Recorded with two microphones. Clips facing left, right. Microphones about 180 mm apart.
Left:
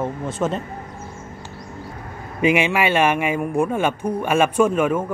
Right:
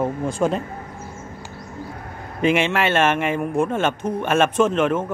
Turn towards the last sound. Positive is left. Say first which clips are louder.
# left 1 dB
turn(degrees=10)  # may be behind; listen again after turning